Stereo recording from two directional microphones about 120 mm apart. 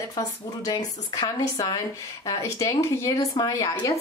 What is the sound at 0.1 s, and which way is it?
Speech, 30° left (ahead or behind).